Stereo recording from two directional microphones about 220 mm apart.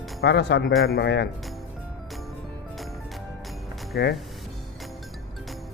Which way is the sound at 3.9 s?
50° left (ahead or behind).